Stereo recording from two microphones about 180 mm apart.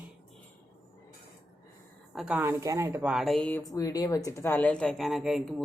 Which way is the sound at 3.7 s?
20° left (ahead or behind).